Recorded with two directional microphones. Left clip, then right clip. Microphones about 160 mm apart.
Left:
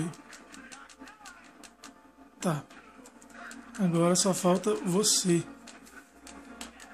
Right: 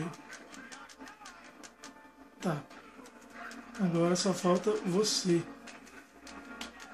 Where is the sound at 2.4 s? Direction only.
45° left (ahead or behind).